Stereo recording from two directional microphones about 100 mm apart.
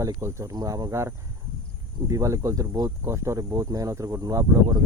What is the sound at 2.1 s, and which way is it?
Speech, 30° right (ahead or behind).